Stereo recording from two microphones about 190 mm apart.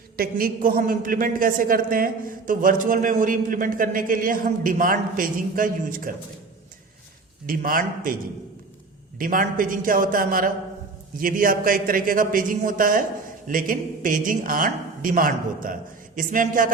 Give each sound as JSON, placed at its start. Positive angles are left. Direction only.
{"t": 0.2, "sound": "a man's voice", "side_deg": -50}
{"t": 7.4, "sound": "a man's voice", "side_deg": -50}
{"t": 9.1, "sound": "a man's voice", "side_deg": -45}